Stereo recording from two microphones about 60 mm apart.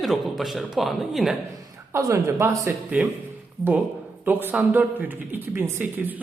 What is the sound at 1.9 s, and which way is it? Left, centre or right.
Speech, right.